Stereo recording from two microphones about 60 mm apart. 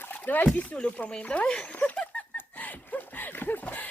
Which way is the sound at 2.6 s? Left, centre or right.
Left.